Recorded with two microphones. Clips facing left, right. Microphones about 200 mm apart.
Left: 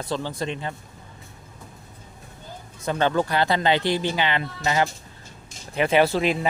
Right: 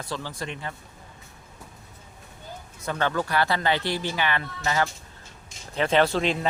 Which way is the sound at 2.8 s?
20° left (ahead or behind).